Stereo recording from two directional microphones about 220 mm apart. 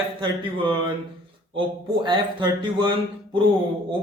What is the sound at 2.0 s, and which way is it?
Speech, 20° right (ahead or behind).